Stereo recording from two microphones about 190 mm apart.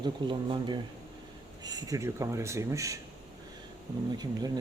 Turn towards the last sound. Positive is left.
turn(degrees=-20)  # may be behind; listen again after turning